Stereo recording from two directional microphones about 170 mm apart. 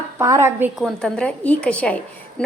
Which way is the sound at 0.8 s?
Centre (ahead or behind).